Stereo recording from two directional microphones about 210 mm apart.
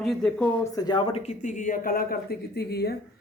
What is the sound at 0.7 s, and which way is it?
A woman's voice, 20° left (ahead or behind).